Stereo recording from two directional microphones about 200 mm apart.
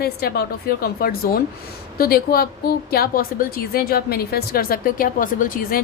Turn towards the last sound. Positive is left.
turn(degrees=45)  # may be behind; listen again after turning